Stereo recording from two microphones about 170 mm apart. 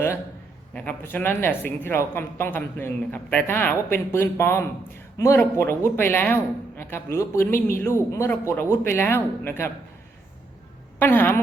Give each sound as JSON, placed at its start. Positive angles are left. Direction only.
{"t": 0.7, "sound": "speech", "side_deg": 10}
{"t": 11.0, "sound": "speech", "side_deg": 10}